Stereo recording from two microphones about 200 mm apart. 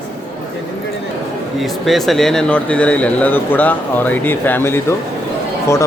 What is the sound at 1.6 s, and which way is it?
Speech, centre (ahead or behind).